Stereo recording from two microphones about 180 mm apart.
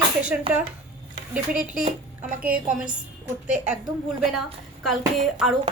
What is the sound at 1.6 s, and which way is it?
Speech, 45° right (ahead or behind).